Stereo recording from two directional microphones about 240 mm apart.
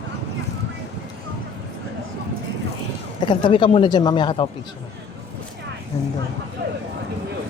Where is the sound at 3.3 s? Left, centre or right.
Left.